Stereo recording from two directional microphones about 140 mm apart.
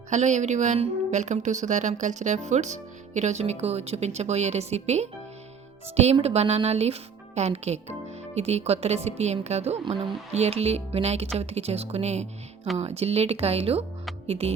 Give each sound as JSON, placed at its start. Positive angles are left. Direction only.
{"t": 0.1, "sound": "speech", "side_deg": -60}
{"t": 6.1, "sound": "speech", "side_deg": -45}